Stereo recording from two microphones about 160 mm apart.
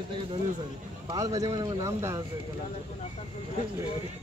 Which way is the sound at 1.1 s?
20° right (ahead or behind).